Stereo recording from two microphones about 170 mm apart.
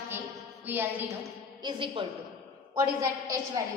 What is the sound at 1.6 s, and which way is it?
Speech, 30° right (ahead or behind).